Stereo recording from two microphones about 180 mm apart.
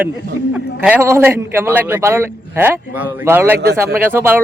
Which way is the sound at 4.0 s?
10° right (ahead or behind).